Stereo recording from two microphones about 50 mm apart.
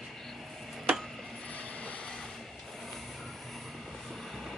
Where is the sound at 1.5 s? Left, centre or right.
Left.